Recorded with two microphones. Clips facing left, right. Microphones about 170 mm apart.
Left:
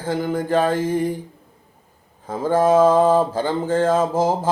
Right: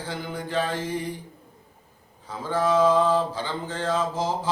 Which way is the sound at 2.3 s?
50° left (ahead or behind).